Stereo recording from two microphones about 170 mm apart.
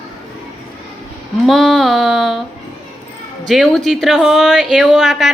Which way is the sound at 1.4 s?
Centre (ahead or behind).